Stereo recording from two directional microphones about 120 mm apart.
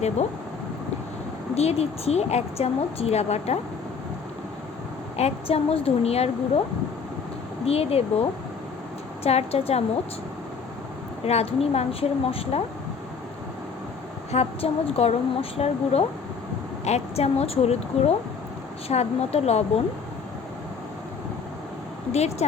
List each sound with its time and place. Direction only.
1.5 s a woman's voice: 60° left (ahead or behind)
5.1 s a woman's voice: 60° left (ahead or behind)
7.6 s a woman's voice: 55° left (ahead or behind)
11.3 s a woman's voice: 60° left (ahead or behind)
14.3 s a woman's voice: 60° left (ahead or behind)
22.1 s a woman's voice: 65° left (ahead or behind)